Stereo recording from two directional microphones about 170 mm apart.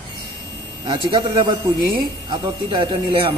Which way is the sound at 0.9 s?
30° right (ahead or behind).